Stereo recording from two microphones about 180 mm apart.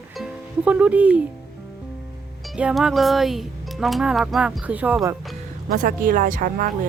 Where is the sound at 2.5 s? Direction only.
5° right (ahead or behind).